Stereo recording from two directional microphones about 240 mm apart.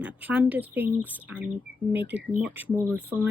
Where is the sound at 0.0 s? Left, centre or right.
Centre.